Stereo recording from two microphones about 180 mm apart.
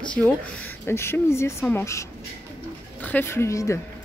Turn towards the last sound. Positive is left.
turn(degrees=15)  # may be behind; listen again after turning